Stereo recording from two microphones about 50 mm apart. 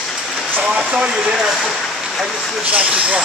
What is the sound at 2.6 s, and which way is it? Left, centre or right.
Vehicle, right.